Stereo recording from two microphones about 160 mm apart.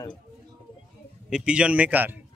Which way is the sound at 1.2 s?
5° right (ahead or behind).